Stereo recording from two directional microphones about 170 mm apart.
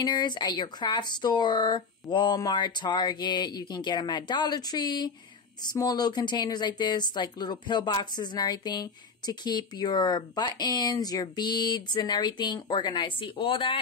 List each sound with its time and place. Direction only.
0.0 s speech: 25° left (ahead or behind)